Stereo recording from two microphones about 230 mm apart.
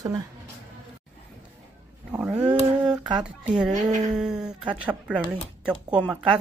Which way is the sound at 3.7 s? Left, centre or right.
Right.